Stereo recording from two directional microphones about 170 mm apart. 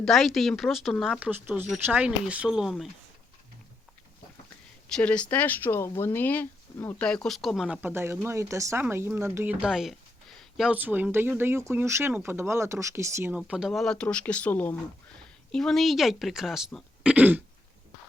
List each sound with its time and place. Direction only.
0.0 s speech: centre (ahead or behind)
4.9 s speech: 5° left (ahead or behind)
7.8 s speech: 15° right (ahead or behind)